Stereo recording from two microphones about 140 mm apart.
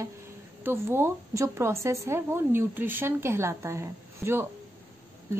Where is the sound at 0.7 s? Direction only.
15° right (ahead or behind).